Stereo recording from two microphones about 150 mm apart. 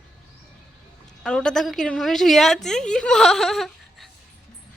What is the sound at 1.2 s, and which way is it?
A woman's voice, 5° left (ahead or behind).